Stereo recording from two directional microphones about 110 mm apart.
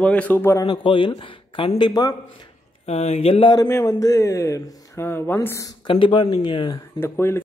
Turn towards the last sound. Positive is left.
turn(degrees=20)  # may be behind; listen again after turning